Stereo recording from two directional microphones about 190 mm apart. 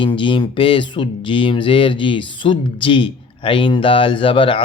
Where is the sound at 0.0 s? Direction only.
25° left (ahead or behind).